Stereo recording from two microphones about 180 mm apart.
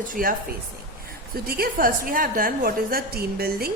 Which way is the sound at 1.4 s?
55° right (ahead or behind).